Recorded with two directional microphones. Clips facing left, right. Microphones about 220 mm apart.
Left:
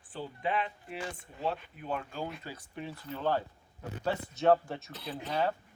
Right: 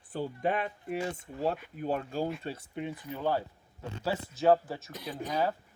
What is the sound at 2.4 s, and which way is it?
Speech, 25° right (ahead or behind).